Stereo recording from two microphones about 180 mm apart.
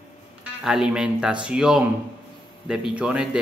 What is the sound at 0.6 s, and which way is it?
A man's voice, 5° right (ahead or behind).